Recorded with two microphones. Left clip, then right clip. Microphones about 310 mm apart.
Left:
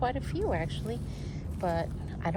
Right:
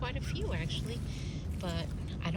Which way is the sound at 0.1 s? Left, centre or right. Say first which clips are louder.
Left 8 dB; centre.